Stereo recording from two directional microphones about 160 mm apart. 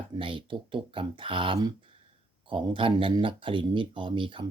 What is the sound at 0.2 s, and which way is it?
Speech, 30° right (ahead or behind).